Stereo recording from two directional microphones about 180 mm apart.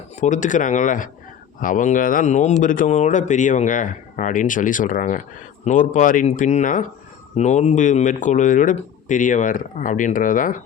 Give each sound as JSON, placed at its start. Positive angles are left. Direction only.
{"t": 0.2, "sound": "speech", "side_deg": 45}